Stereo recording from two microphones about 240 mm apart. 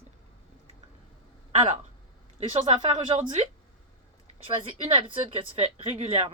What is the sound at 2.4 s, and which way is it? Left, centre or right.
A woman's voice, right.